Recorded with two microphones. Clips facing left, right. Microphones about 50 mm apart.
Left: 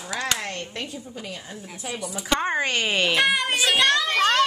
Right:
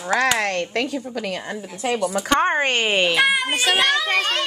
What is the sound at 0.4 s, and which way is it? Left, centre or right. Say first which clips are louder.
Speech: right 9 dB; right.